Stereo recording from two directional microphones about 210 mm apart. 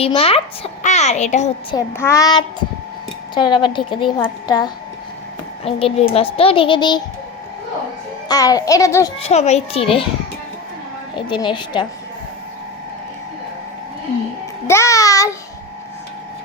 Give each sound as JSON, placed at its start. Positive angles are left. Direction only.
{"t": 0.0, "sound": "a child's voice", "side_deg": 30}
{"t": 1.7, "sound": "a child's voice", "side_deg": 15}
{"t": 8.3, "sound": "a child's voice", "side_deg": 15}
{"t": 9.1, "sound": "a woman's voice", "side_deg": 30}
{"t": 11.1, "sound": "a woman's voice", "side_deg": 20}
{"t": 14.7, "sound": "a child's voice", "side_deg": 15}